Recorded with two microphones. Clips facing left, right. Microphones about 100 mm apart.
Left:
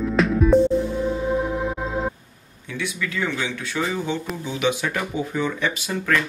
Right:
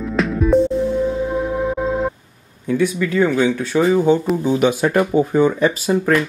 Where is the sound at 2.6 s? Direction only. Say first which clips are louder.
Right 11 dB; 40° right (ahead or behind).